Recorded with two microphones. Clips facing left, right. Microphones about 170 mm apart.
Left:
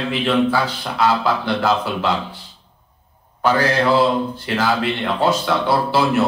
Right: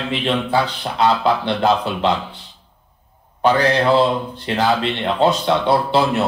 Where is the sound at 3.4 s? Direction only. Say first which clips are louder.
Right 1 dB; 20° right (ahead or behind).